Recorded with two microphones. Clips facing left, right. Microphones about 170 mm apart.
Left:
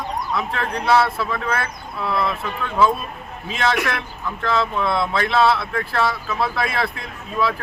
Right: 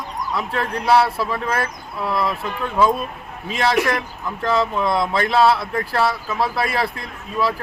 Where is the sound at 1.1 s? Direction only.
35° right (ahead or behind).